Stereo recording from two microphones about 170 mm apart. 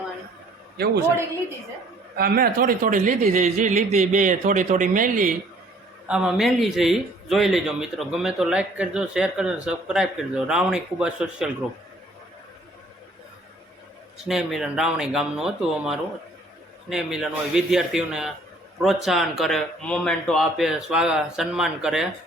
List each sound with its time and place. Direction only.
2.1 s a man's voice: 60° right (ahead or behind)
6.1 s a man's voice: 5° right (ahead or behind)
14.3 s a man's voice: centre (ahead or behind)